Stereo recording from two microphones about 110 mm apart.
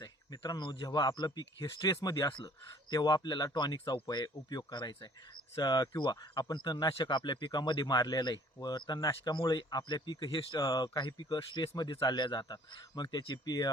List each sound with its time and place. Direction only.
0.0 s speech: 35° left (ahead or behind)